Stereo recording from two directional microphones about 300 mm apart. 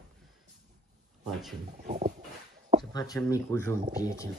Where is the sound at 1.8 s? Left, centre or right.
Right.